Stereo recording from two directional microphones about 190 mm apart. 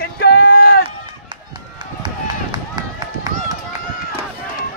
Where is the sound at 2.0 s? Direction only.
25° right (ahead or behind).